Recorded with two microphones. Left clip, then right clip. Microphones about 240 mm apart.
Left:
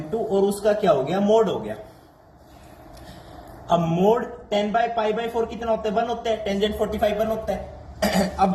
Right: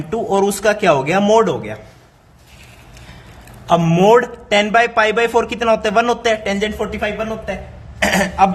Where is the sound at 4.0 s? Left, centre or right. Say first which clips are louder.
Right 9 dB; right.